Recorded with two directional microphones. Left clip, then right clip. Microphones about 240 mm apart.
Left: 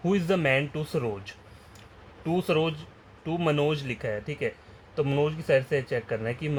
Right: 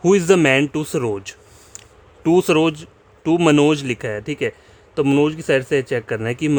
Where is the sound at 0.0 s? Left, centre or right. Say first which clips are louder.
Right 12 dB; right.